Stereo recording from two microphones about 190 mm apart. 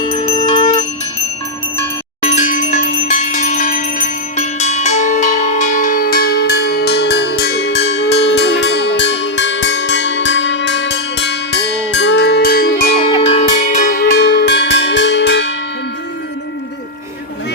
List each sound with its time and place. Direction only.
0.1 s music: 20° left (ahead or behind)
2.2 s bell: 40° left (ahead or behind)
13.1 s music: 30° left (ahead or behind)
13.7 s music: 45° left (ahead or behind); by 15.5 s 75° left (ahead or behind)